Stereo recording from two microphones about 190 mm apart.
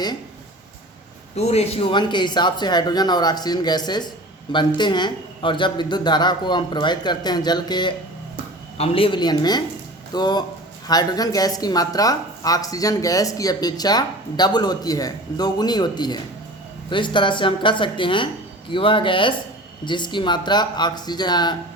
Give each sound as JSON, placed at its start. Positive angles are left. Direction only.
{"t": 1.4, "sound": "a woman's voice", "side_deg": 35}